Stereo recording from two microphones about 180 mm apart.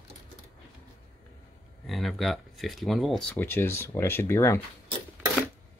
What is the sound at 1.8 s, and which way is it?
Speech, centre (ahead or behind).